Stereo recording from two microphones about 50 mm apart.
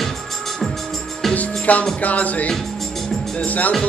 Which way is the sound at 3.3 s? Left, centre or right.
Left.